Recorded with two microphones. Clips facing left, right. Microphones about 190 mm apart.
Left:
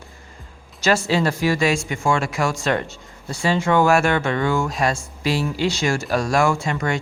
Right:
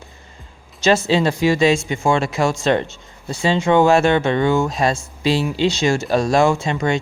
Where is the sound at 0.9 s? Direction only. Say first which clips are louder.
Right 3 dB; 20° right (ahead or behind).